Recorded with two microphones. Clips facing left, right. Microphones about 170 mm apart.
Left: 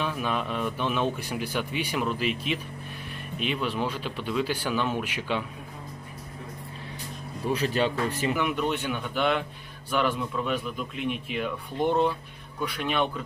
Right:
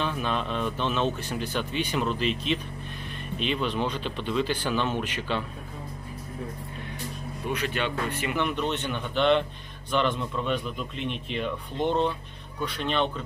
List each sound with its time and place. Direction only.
0.0 s speech: 5° left (ahead or behind)
7.4 s speech: 35° left (ahead or behind)
8.4 s speech: 10° left (ahead or behind)